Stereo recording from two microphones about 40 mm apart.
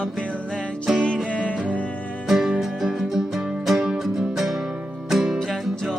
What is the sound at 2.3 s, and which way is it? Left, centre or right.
Music, centre.